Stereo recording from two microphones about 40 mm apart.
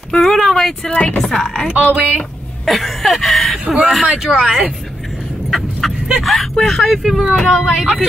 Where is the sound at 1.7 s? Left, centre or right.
Right.